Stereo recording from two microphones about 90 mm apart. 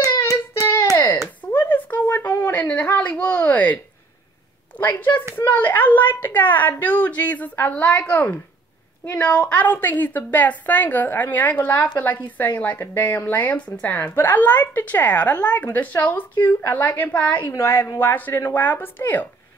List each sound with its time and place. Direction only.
0.0 s child singing: 35° left (ahead or behind)
0.9 s a sound: 25° left (ahead or behind)
4.7 s a woman's voice: 20° left (ahead or behind)